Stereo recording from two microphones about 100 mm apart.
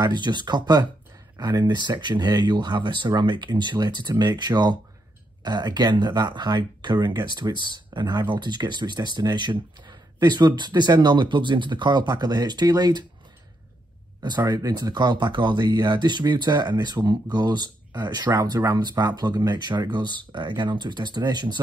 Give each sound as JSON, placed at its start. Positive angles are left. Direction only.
{"t": 0.0, "sound": "speech", "side_deg": -45}
{"t": 14.2, "sound": "speech", "side_deg": -45}